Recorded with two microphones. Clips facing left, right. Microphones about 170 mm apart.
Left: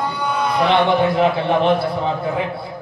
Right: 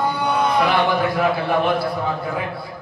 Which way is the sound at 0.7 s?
25° left (ahead or behind).